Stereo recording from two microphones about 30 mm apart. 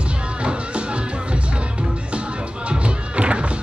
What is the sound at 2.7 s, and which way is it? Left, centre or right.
Music, right.